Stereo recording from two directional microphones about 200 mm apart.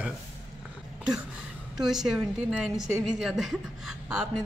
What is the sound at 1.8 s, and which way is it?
A woman's voice, centre (ahead or behind).